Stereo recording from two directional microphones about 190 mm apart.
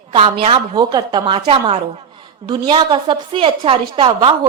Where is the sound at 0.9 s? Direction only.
20° right (ahead or behind).